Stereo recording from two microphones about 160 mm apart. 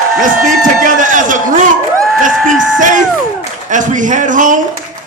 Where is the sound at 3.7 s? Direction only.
50° right (ahead or behind).